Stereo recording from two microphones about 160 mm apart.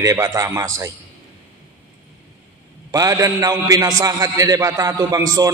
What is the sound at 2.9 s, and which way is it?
Music, 20° right (ahead or behind).